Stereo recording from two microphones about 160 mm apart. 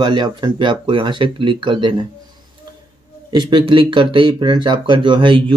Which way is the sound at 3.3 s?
25° right (ahead or behind).